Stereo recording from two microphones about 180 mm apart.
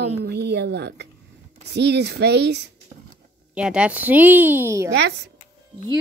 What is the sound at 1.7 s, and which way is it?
Speech, 70° right (ahead or behind).